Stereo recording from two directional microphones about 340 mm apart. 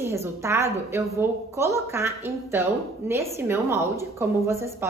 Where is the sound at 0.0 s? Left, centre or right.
Centre.